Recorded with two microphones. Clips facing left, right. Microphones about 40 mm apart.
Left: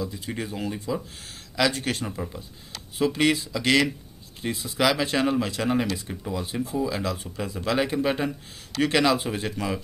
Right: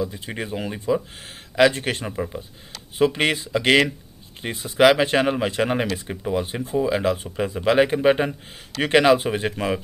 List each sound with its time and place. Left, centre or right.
0.0 s speech: right
3.0 s speech: right